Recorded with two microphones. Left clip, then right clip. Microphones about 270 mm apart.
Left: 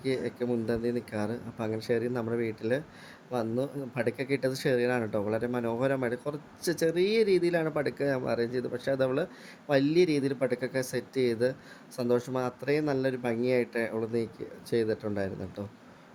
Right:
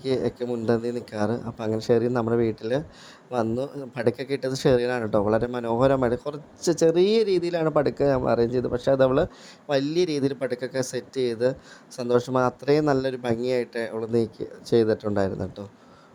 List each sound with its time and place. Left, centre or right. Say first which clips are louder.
0.0 s a man's voice: right 5 dB; centre